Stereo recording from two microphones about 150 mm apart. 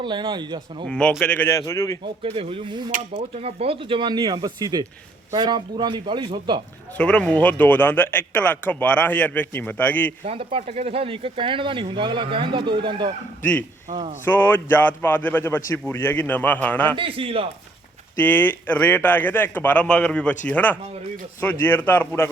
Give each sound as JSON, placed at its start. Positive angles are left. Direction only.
{"t": 0.0, "sound": "speech", "side_deg": -30}
{"t": 0.9, "sound": "a man's voice", "side_deg": 5}
{"t": 2.2, "sound": "speech", "side_deg": -40}
{"t": 6.9, "sound": "speech", "side_deg": 10}
{"t": 10.2, "sound": "speech", "side_deg": -40}
{"t": 14.3, "sound": "speech", "side_deg": 15}
{"t": 16.9, "sound": "speech", "side_deg": -35}
{"t": 18.2, "sound": "speech", "side_deg": 15}